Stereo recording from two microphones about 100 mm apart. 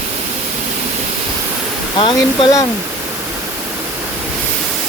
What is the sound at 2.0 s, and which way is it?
Speech, 60° left (ahead or behind).